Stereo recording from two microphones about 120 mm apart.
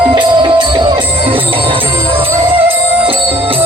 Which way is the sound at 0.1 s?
40° right (ahead or behind).